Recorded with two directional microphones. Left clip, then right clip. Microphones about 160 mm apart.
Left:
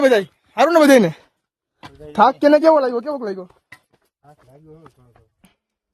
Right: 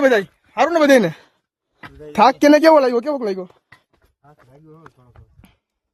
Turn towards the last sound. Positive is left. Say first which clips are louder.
# right 3 dB
turn(degrees=-10)  # may be behind; listen again after turning